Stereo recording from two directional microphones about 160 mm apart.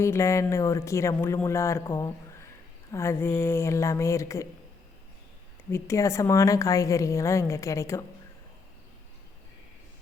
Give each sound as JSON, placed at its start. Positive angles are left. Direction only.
{"t": 0.0, "sound": "speech", "side_deg": 15}
{"t": 5.7, "sound": "a woman's voice", "side_deg": 20}